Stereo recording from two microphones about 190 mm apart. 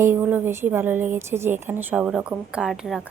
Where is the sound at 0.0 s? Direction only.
10° right (ahead or behind).